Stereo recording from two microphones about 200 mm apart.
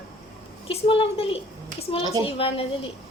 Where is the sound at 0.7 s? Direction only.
25° left (ahead or behind).